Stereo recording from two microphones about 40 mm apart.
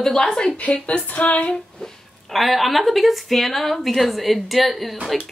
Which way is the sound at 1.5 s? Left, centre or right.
Centre.